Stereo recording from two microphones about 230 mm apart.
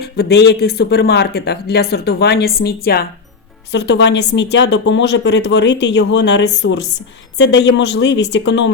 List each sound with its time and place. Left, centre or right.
0.0 s speech: left